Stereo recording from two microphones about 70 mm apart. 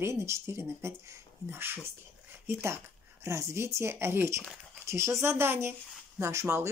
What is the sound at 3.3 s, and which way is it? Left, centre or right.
Speech, right.